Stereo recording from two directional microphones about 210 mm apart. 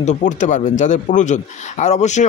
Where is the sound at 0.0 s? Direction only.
35° left (ahead or behind).